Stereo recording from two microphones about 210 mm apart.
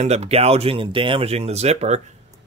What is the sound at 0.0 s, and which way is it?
Speech, 30° right (ahead or behind).